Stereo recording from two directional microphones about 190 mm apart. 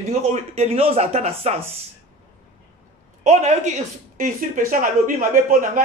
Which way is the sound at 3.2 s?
40° right (ahead or behind).